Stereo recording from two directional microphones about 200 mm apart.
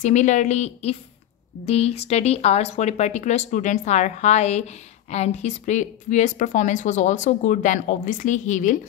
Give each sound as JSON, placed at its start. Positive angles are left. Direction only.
{"t": 0.0, "sound": "speech", "side_deg": 35}